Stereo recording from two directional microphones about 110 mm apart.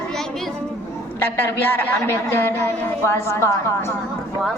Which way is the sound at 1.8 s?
20° left (ahead or behind).